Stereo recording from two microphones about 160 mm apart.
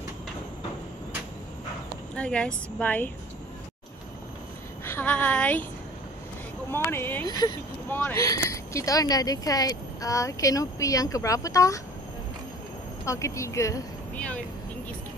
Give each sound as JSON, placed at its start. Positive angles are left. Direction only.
{"t": 2.1, "sound": "speech", "side_deg": 5}
{"t": 4.8, "sound": "a woman's voice", "side_deg": 10}
{"t": 6.7, "sound": "speech", "side_deg": 15}
{"t": 13.0, "sound": "speech", "side_deg": 20}
{"t": 14.1, "sound": "speech", "side_deg": 10}